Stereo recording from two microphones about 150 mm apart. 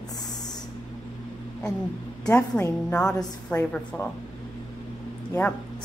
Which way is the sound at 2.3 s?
10° left (ahead or behind).